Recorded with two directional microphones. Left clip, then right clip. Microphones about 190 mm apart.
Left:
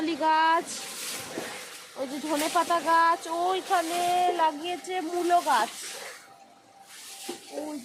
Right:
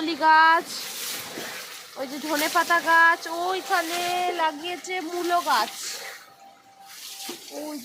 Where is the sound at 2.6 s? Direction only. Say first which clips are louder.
Right 5 dB; 10° right (ahead or behind).